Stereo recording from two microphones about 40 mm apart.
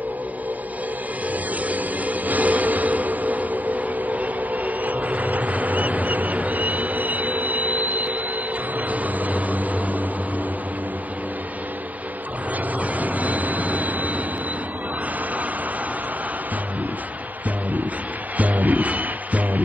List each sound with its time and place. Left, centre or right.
1.7 s music: right
8.9 s a sound: right
13.0 s train: right
18.4 s music: right